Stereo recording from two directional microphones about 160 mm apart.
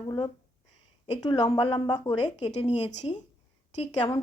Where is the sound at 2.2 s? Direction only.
40° left (ahead or behind).